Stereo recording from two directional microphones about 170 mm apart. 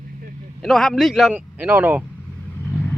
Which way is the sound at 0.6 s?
Centre (ahead or behind).